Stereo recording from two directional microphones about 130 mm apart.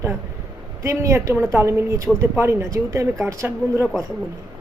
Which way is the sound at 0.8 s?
25° right (ahead or behind).